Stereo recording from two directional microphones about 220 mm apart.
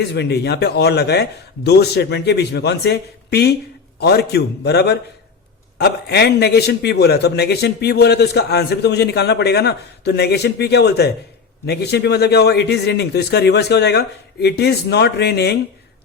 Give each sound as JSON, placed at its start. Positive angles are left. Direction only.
{"t": 0.1, "sound": "a man's voice", "side_deg": 50}